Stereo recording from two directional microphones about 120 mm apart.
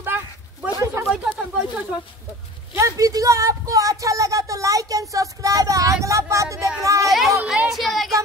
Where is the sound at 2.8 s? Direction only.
30° right (ahead or behind).